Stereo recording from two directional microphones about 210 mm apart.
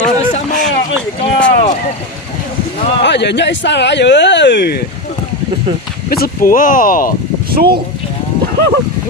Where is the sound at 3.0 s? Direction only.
55° left (ahead or behind).